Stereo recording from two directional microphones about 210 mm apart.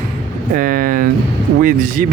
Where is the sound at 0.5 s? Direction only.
40° right (ahead or behind).